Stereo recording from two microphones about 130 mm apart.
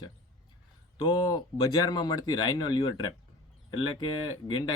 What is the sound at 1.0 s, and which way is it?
Speech, 30° left (ahead or behind).